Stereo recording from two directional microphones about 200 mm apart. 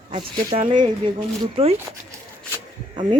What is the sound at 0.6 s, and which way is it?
Speech, 20° right (ahead or behind).